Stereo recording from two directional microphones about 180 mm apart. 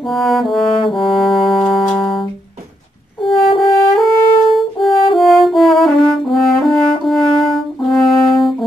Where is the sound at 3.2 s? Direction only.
30° left (ahead or behind).